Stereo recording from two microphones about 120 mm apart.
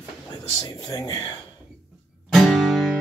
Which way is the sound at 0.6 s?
30° left (ahead or behind).